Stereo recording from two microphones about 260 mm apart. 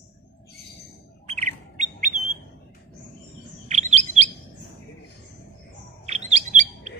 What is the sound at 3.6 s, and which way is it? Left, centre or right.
Chirp, right.